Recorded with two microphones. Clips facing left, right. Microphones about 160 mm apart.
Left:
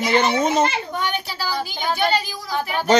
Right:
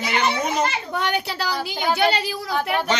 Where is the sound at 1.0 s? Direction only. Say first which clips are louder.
Right 2 dB; 65° right (ahead or behind).